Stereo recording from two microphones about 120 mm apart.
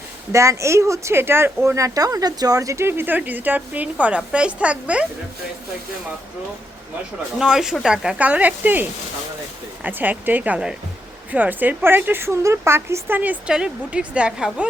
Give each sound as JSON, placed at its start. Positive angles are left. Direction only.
{"t": 0.3, "sound": "speech", "side_deg": -25}
{"t": 7.3, "sound": "speech", "side_deg": -5}